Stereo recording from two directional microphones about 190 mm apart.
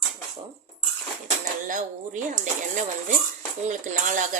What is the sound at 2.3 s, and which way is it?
Speech, 40° right (ahead or behind).